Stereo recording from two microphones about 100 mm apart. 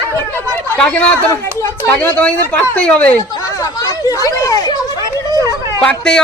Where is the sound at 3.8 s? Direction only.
35° left (ahead or behind).